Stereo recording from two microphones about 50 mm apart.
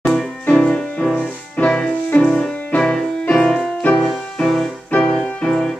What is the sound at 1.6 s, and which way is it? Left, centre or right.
Music, centre.